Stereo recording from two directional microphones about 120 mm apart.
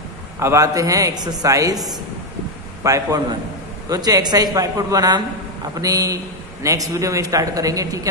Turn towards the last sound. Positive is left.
turn(degrees=-30)  # may be behind; listen again after turning